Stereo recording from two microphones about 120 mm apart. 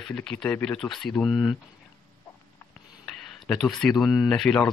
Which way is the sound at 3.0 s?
5° left (ahead or behind).